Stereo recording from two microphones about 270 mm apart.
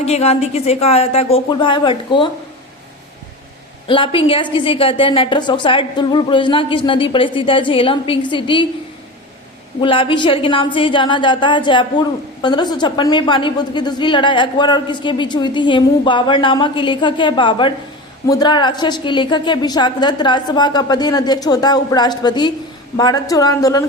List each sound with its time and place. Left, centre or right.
0.0 s a woman's voice: left
3.8 s a woman's voice: centre
9.8 s a woman's voice: centre